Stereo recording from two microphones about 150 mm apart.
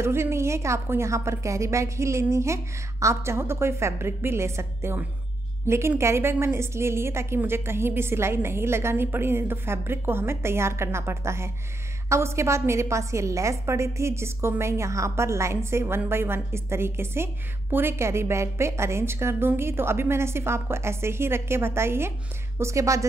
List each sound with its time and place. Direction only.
0.0 s a woman's voice: 15° right (ahead or behind)